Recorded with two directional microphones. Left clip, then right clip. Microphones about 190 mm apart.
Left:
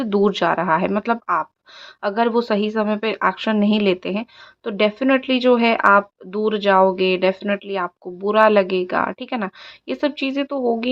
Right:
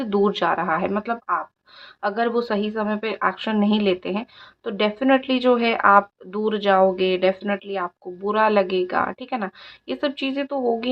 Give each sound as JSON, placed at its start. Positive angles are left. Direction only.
{"t": 0.0, "sound": "speech", "side_deg": 25}